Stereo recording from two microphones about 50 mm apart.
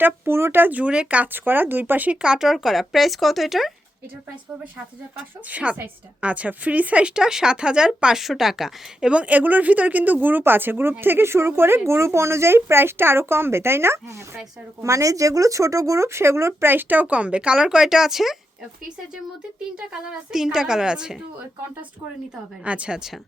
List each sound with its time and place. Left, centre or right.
0.0 s speech: right
0.6 s a woman's voice: right
1.3 s speech: right
2.2 s speech: centre
5.5 s a woman's voice: right; by 9.0 s centre
9.0 s speech: right
11.9 s speech: right
16.6 s speech: right; by 18.3 s centre
19.9 s speech: centre
22.6 s a woman's voice: right